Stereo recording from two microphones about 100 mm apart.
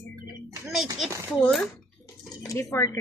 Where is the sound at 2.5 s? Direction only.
30° left (ahead or behind).